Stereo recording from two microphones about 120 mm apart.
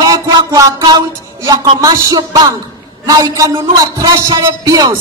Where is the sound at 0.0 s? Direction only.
35° right (ahead or behind).